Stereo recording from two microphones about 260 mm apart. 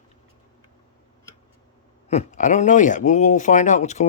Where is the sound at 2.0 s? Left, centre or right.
Left.